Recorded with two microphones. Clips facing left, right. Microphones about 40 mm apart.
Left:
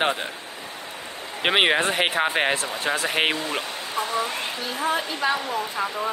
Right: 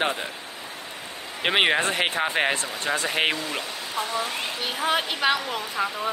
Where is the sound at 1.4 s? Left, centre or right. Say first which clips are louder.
Left 1 dB; centre.